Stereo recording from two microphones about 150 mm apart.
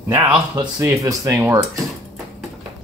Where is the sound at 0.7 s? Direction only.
20° right (ahead or behind).